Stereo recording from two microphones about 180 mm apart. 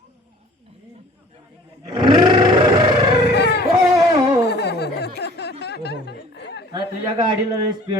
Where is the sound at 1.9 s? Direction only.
25° right (ahead or behind).